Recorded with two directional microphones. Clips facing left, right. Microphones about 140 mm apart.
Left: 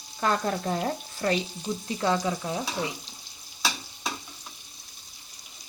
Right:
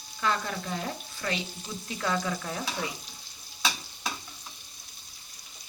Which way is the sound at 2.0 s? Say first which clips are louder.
Left 3 dB; 25° left (ahead or behind).